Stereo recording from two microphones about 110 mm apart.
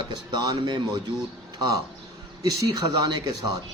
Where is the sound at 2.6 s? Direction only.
35° right (ahead or behind).